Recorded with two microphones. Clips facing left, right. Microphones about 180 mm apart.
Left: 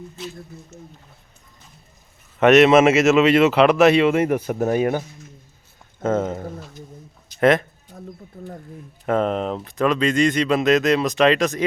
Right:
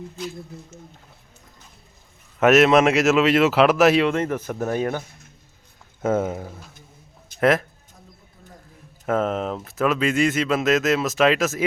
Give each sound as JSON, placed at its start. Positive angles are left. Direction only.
{"t": 2.4, "sound": "speech", "side_deg": 0}
{"t": 4.1, "sound": "speech", "side_deg": 10}
{"t": 6.0, "sound": "a man's voice", "side_deg": -10}
{"t": 7.9, "sound": "bird", "side_deg": 55}
{"t": 9.0, "sound": "speech", "side_deg": 0}